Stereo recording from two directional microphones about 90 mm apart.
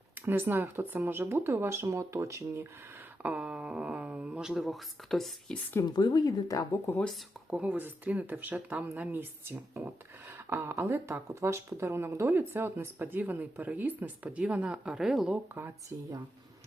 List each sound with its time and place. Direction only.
0.3 s speech: 25° right (ahead or behind)
3.2 s speech: 10° right (ahead or behind); by 5.5 s 5° left (ahead or behind)
5.8 s speech: 50° left (ahead or behind)
6.8 s speech: 15° left (ahead or behind)
7.5 s speech: 15° right (ahead or behind)
15.6 s speech: 25° right (ahead or behind)